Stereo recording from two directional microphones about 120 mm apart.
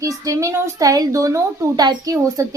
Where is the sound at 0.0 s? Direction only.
30° right (ahead or behind).